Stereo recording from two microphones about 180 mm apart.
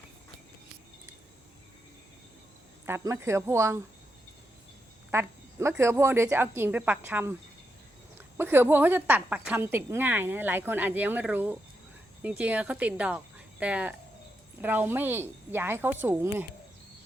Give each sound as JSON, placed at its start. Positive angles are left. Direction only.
{"t": 2.8, "sound": "a woman's voice", "side_deg": -15}
{"t": 5.1, "sound": "a woman's voice", "side_deg": -15}
{"t": 8.4, "sound": "a woman's voice", "side_deg": -10}